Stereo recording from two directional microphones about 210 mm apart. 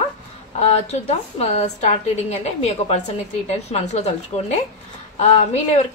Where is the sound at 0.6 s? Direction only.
30° left (ahead or behind).